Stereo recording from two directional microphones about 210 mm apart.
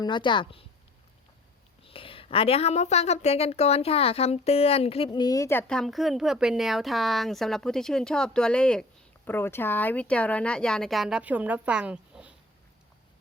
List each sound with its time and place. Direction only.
0.0 s speech: 20° left (ahead or behind)
1.8 s a woman's voice: 25° left (ahead or behind); by 12.3 s 5° right (ahead or behind)